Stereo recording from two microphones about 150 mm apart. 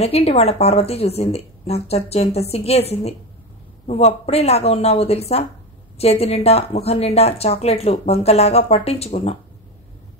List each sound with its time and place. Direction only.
0.0 s a woman's voice: 40° left (ahead or behind)